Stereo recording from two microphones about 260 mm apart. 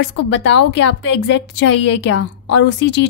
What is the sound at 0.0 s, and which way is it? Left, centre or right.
A woman's voice, left.